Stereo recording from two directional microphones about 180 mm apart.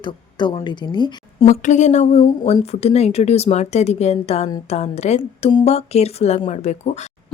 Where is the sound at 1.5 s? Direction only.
40° left (ahead or behind).